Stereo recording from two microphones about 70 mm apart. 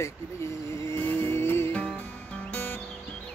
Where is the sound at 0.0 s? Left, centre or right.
Left.